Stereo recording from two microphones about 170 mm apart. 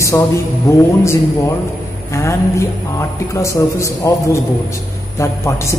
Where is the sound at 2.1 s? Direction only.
15° left (ahead or behind).